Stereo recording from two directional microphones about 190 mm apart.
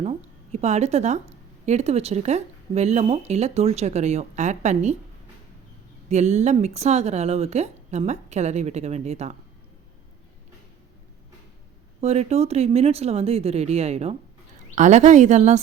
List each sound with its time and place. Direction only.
0.0 s speech: 35° right (ahead or behind)
6.1 s speech: 35° right (ahead or behind)
11.9 s speech: 35° right (ahead or behind)